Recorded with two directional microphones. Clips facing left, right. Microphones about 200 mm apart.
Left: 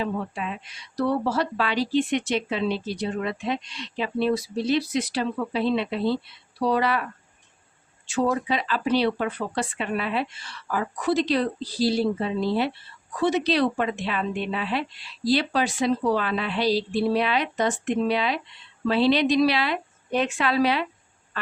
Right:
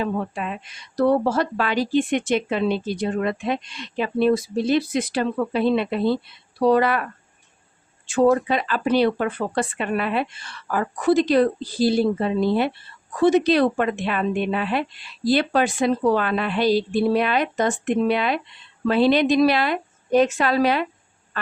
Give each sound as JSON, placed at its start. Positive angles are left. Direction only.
{"t": 0.0, "sound": "speech", "side_deg": -50}
{"t": 8.0, "sound": "speech", "side_deg": -50}